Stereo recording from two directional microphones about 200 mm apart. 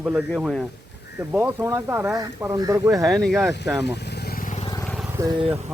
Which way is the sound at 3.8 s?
55° left (ahead or behind).